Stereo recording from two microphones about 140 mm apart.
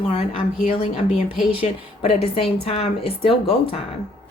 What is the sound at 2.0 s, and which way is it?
Speech, 45° left (ahead or behind).